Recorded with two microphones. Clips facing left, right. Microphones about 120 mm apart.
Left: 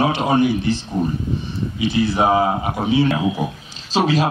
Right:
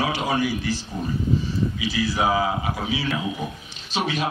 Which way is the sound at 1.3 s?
65° left (ahead or behind).